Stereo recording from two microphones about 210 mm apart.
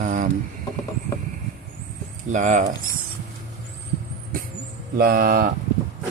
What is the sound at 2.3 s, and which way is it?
Speech, 35° right (ahead or behind).